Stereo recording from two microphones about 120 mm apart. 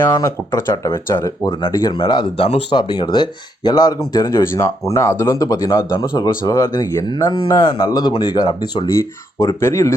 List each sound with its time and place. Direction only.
0.0 s speech: 25° left (ahead or behind); by 2.5 s 40° left (ahead or behind)
2.5 s speech: 55° left (ahead or behind)
2.7 s speech: 40° left (ahead or behind)
9.4 s speech: 25° left (ahead or behind)